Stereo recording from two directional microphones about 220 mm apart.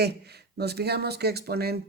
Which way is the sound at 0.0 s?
45° right (ahead or behind).